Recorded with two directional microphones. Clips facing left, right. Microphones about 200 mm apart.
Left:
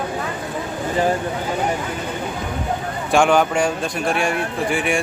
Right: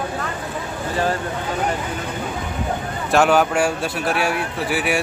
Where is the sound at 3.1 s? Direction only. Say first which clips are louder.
Even; 5° right (ahead or behind).